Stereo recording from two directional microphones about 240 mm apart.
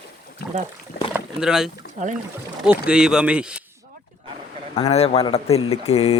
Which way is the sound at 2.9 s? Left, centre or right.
Centre.